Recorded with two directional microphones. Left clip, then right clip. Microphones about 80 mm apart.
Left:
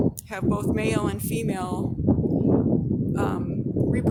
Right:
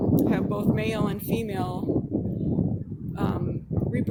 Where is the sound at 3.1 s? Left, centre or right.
Centre.